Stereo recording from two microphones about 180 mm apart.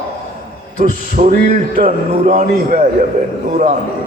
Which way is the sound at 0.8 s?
45° right (ahead or behind).